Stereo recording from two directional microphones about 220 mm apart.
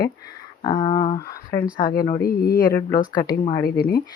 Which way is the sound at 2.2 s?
40° left (ahead or behind).